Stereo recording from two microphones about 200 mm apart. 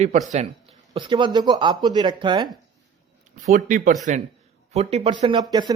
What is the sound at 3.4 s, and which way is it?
Speech, 40° right (ahead or behind).